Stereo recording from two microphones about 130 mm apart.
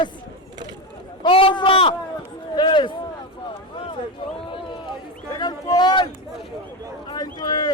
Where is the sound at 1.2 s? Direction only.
40° left (ahead or behind).